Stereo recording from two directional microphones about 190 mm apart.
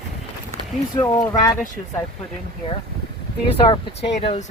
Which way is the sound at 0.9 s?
20° left (ahead or behind).